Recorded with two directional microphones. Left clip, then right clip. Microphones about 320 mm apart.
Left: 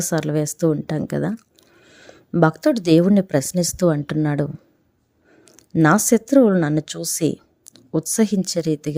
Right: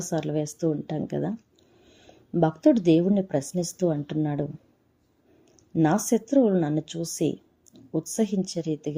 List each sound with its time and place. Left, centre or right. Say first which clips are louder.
0.0 s speech: left 6 dB; left
5.5 s speech: left 7 dB; left